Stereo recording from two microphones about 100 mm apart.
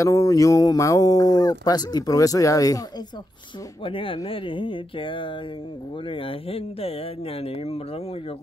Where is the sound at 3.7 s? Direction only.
60° left (ahead or behind).